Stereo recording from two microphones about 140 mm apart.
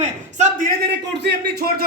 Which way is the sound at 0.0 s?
55° right (ahead or behind).